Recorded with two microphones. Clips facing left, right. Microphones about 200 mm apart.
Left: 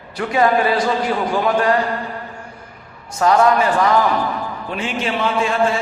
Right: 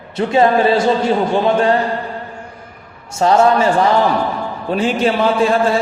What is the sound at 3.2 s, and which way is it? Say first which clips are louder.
A man's voice: right 2 dB; 30° right (ahead or behind).